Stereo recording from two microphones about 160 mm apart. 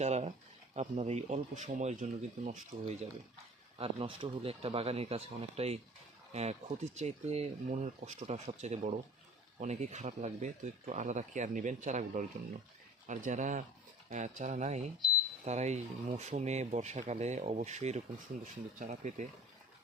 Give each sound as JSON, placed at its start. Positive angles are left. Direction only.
{"t": 0.0, "sound": "speech", "side_deg": -45}
{"t": 3.8, "sound": "speech", "side_deg": -35}